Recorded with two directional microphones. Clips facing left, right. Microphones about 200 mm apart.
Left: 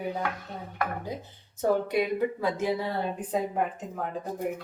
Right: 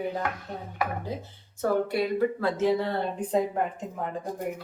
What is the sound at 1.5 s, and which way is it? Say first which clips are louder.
Speech: even; 20° left (ahead or behind).